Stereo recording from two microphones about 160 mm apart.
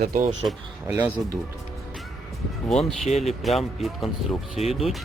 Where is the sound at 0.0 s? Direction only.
55° right (ahead or behind).